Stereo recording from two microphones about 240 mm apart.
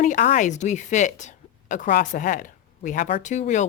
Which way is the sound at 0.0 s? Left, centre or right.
Left.